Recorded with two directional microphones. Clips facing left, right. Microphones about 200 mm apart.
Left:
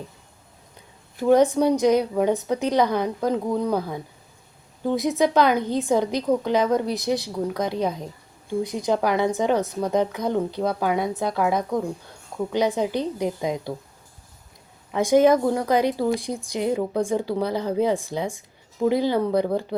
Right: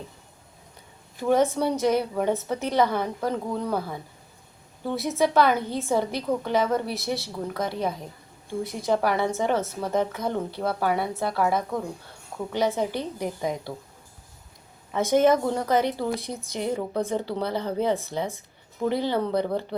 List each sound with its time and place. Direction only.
1.3 s a woman's voice: 15° left (ahead or behind)
14.9 s a woman's voice: 15° left (ahead or behind)